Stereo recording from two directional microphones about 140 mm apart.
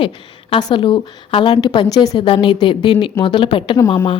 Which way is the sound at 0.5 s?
35° left (ahead or behind).